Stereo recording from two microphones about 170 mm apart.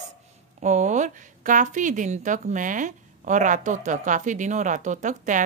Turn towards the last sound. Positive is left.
turn(degrees=-50)  # may be behind; listen again after turning